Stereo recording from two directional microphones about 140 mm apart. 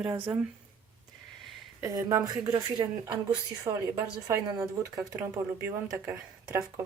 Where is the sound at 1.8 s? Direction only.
25° right (ahead or behind).